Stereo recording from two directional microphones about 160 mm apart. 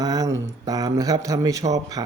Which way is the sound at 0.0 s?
25° right (ahead or behind).